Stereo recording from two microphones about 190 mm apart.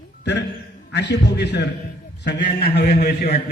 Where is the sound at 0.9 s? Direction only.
65° left (ahead or behind).